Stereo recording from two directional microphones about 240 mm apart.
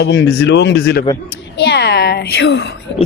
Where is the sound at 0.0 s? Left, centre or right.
Left.